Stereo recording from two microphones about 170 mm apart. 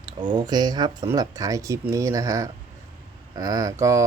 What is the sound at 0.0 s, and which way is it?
Speech, 25° right (ahead or behind).